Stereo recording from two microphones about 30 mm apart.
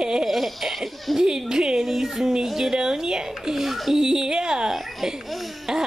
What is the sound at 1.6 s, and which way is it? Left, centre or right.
Speech, centre.